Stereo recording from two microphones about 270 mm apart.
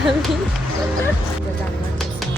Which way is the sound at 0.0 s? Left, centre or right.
Centre.